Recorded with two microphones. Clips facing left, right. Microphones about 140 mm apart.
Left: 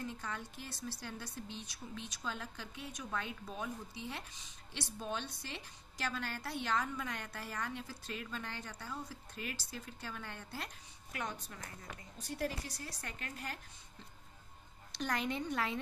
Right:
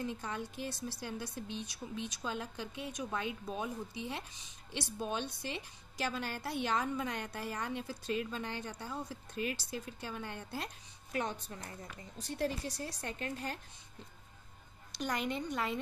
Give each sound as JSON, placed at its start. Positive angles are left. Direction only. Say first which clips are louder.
{"t": 0.0, "sound": "a woman's voice", "louder": "right 4 dB", "side_deg": -20}
{"t": 15.0, "sound": "speech", "louder": "right 1 dB", "side_deg": -5}